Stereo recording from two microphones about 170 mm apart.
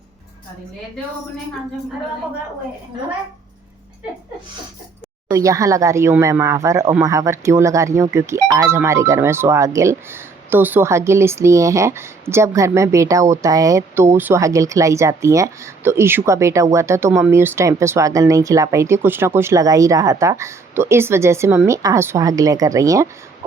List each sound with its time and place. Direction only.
5.3 s speech: 20° right (ahead or behind)